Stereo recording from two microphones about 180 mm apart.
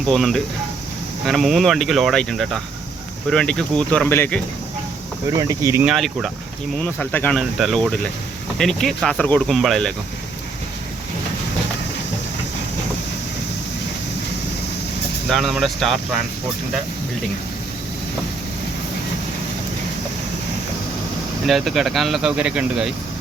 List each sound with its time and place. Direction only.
0.0 s speech: centre (ahead or behind)
5.4 s speech: 20° right (ahead or behind)
5.8 s speech: 5° right (ahead or behind)
15.3 s speech: centre (ahead or behind)
21.4 s speech: centre (ahead or behind)